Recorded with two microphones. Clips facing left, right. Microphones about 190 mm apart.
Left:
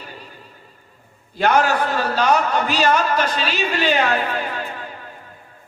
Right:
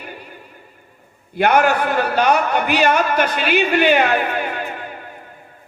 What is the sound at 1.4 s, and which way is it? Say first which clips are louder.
A man's voice: right 2 dB; 60° right (ahead or behind).